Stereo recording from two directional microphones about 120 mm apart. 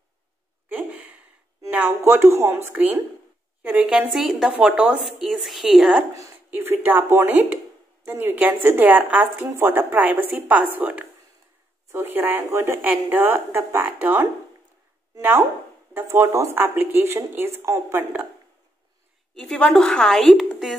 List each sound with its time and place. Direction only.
0.7 s a sound: 15° right (ahead or behind)
1.7 s a woman's voice: 15° right (ahead or behind)
6.5 s speech: 20° right (ahead or behind)
15.9 s speech: 20° right (ahead or behind)
19.3 s a woman's voice: 5° left (ahead or behind)